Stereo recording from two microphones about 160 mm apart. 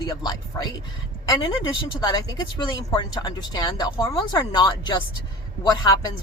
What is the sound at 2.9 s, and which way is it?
Speech, 25° left (ahead or behind).